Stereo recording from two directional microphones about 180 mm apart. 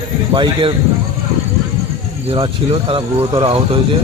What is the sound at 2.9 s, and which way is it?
Speech, 25° right (ahead or behind).